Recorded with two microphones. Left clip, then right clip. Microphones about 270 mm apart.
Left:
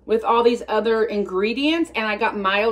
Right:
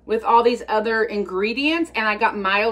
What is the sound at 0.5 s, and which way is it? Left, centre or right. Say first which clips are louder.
Speech: even; centre.